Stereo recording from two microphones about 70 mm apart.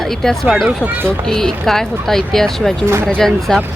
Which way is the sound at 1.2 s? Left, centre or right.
Centre.